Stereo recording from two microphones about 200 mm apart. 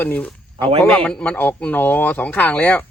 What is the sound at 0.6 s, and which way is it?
Speech, 25° right (ahead or behind).